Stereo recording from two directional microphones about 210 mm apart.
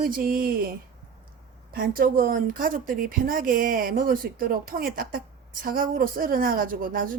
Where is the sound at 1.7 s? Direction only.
45° right (ahead or behind).